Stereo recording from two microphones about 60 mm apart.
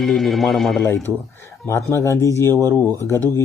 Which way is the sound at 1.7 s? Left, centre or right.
Left.